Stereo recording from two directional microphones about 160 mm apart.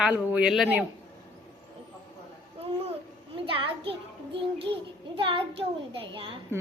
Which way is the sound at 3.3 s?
35° right (ahead or behind).